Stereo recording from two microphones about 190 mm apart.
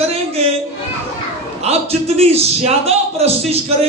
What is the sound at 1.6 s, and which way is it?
Speech, 30° right (ahead or behind).